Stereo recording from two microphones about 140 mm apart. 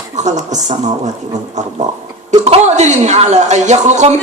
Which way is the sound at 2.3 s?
50° right (ahead or behind).